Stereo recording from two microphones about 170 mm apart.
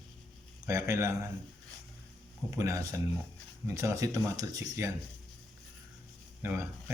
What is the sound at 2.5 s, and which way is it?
Speech, 20° right (ahead or behind).